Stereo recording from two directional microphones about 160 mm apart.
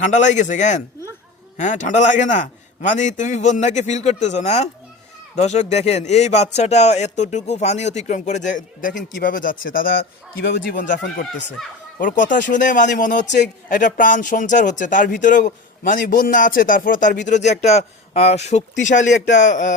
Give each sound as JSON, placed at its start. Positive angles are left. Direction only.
{"t": 0.0, "sound": "a man's voice", "side_deg": 50}
{"t": 11.6, "sound": "speech", "side_deg": 0}
{"t": 11.9, "sound": "a man's voice", "side_deg": 55}